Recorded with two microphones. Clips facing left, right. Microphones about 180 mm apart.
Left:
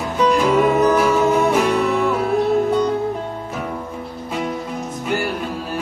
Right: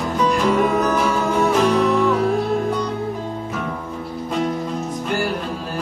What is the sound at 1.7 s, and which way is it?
Music, 5° left (ahead or behind).